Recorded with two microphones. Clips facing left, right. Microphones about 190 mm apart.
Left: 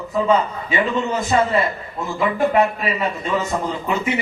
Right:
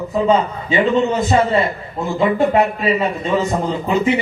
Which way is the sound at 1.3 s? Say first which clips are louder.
Left 1 dB; 25° right (ahead or behind).